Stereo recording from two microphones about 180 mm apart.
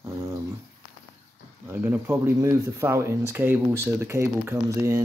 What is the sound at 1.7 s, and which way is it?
Speech, 10° right (ahead or behind).